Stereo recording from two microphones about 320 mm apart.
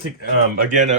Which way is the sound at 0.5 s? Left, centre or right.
Right.